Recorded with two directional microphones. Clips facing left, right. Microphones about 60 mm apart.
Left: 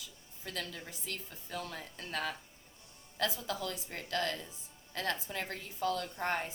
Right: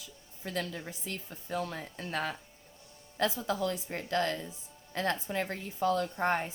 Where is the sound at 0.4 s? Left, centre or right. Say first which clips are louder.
Right 6 dB; right.